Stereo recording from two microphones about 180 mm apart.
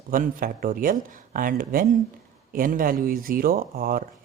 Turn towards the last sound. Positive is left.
turn(degrees=-55)  # may be behind; listen again after turning